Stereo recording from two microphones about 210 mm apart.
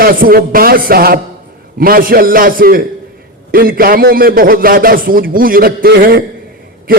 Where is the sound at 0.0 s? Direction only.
40° right (ahead or behind).